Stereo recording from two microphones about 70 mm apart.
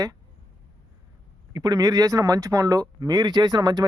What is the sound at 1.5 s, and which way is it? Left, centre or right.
A man's voice, right.